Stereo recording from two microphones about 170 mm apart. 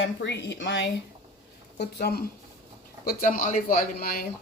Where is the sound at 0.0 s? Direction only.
90° left.